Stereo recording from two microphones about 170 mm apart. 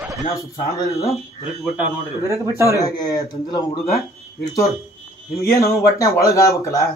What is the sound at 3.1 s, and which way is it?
Speech, 20° left (ahead or behind).